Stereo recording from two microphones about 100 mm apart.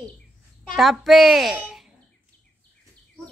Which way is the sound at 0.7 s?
Centre (ahead or behind).